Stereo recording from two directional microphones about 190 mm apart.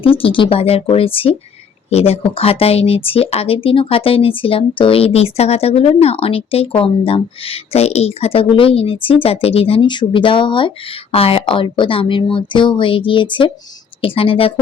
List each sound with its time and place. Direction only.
0.0 s speech: 30° left (ahead or behind)